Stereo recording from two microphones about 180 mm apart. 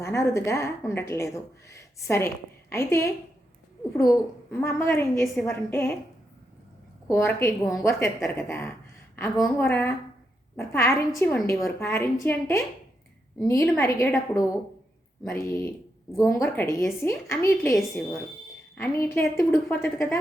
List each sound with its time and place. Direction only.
0.0 s a woman's voice: 15° left (ahead or behind)
7.1 s a woman's voice: 15° left (ahead or behind)
15.2 s a woman's voice: 10° left (ahead or behind)
17.7 s speech: centre (ahead or behind)
18.8 s a woman's voice: 15° left (ahead or behind)